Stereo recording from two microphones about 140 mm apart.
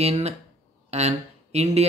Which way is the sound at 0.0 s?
50° right (ahead or behind).